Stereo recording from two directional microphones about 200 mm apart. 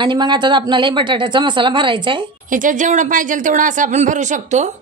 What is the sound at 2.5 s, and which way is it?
Speech, 40° right (ahead or behind).